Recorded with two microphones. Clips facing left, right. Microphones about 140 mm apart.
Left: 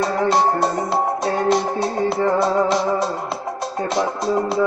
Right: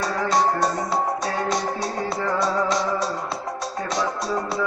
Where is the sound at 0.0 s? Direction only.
25° left (ahead or behind).